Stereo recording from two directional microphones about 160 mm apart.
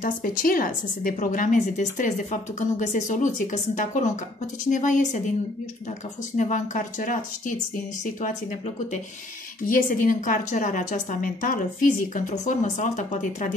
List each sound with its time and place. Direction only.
0.0 s a woman's voice: 60° left (ahead or behind)
6.3 s a woman's voice: 50° left (ahead or behind)